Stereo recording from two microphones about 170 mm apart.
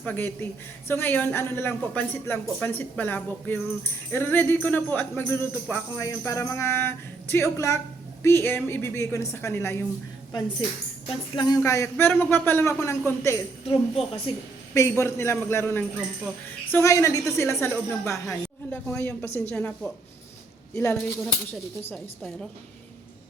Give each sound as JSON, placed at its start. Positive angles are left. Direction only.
{"t": 0.0, "sound": "speech", "side_deg": 10}
{"t": 11.3, "sound": "speech", "side_deg": 20}
{"t": 13.7, "sound": "a woman's voice", "side_deg": 30}
{"t": 14.7, "sound": "speech", "side_deg": 15}
{"t": 21.8, "sound": "a woman's voice", "side_deg": 5}